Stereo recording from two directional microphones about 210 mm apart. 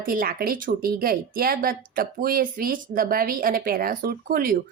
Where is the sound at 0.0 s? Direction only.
45° right (ahead or behind).